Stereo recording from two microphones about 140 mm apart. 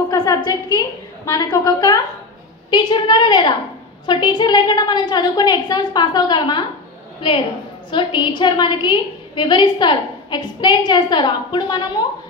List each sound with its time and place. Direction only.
0.1 s a woman's voice: 25° left (ahead or behind)